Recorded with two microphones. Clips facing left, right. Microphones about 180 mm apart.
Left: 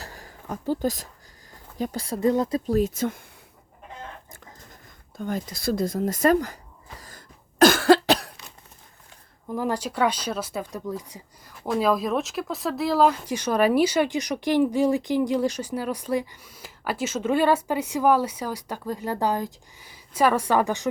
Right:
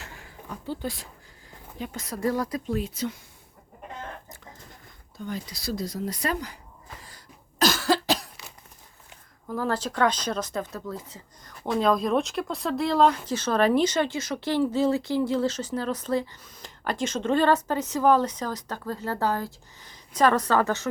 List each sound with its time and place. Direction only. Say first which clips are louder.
0.0 s a sound: left 2 dB; 40° left (ahead or behind)
1.5 s speech: left 6 dB; 40° left (ahead or behind); by 2.6 s 20° left (ahead or behind)
2.6 s speech: left 6 dB; 40° left (ahead or behind)
5.1 s speech: left 5 dB; 50° left (ahead or behind)
7.6 s cough: left 7 dB; 55° left (ahead or behind)
9.5 s speech: left 1 dB; 15° left (ahead or behind)
11.6 s speech: even; 5° left (ahead or behind)